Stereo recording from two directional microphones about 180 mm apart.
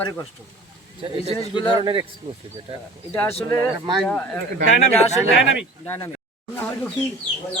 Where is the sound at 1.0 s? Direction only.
30° right (ahead or behind).